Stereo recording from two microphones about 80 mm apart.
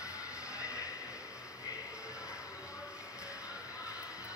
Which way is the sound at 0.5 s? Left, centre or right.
Left.